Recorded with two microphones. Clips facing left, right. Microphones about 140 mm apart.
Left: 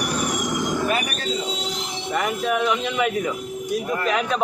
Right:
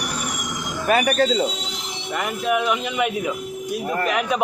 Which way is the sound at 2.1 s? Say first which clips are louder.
Even; 5° right (ahead or behind).